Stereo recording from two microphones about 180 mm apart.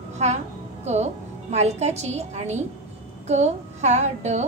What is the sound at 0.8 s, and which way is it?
A woman's voice, 40° right (ahead or behind).